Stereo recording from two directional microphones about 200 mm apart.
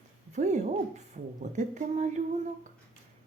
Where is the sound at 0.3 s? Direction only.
35° right (ahead or behind).